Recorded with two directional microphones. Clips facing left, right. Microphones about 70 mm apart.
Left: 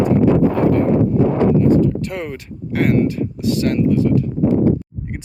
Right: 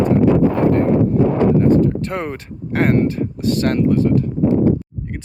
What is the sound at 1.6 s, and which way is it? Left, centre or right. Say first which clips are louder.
Speech: even; right.